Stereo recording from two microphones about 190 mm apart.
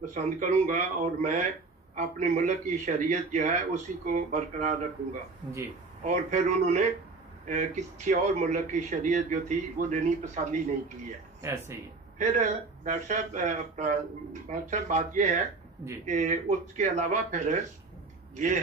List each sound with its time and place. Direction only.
0.0 s a man's voice: 40° right (ahead or behind)
6.0 s a man's voice: 40° right (ahead or behind)
11.4 s speech: 15° right (ahead or behind)
12.2 s a man's voice: 40° right (ahead or behind)